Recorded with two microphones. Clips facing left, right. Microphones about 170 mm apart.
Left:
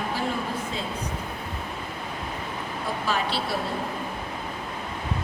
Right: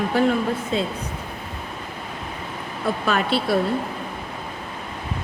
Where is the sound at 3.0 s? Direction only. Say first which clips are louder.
Right 6 dB; 60° right (ahead or behind).